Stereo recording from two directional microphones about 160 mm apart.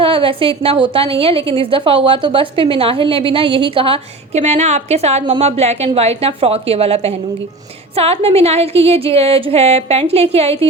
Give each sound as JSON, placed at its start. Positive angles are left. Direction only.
{"t": 0.0, "sound": "a woman's voice", "side_deg": -35}